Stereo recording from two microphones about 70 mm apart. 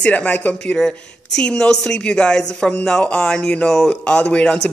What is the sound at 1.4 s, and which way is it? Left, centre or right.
Speech, centre.